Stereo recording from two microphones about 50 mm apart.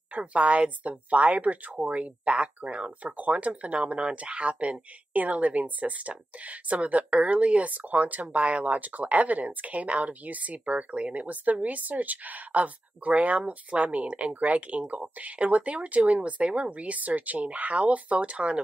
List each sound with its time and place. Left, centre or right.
0.1 s a woman's voice: right